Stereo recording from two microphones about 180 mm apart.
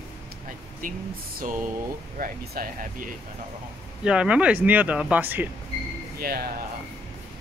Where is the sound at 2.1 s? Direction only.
50° right (ahead or behind).